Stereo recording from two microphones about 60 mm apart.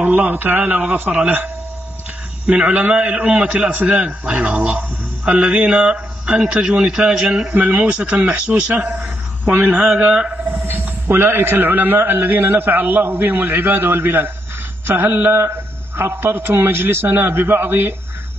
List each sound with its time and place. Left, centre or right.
0.0 s a man's voice: right
7.5 s a man's voice: right
10.5 s a man's voice: right